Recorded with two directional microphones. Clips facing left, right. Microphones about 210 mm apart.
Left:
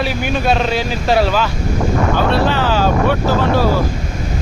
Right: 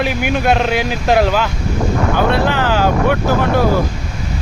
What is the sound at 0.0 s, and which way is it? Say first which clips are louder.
Speech: right 1 dB; 15° right (ahead or behind).